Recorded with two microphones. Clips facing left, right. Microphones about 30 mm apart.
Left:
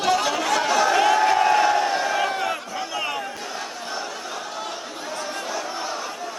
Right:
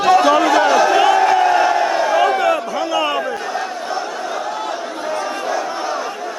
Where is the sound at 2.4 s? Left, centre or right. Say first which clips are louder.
Right 9 dB; right.